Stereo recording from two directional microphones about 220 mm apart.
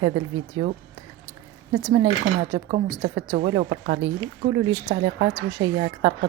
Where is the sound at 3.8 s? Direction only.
55° right (ahead or behind).